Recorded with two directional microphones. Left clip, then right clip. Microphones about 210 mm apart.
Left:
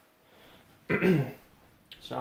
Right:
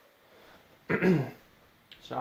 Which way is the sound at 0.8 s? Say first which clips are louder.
Even; 25° right (ahead or behind).